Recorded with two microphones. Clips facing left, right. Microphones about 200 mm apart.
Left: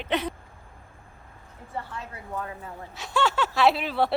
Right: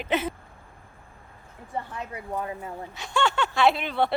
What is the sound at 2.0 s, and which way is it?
Speech, 20° right (ahead or behind).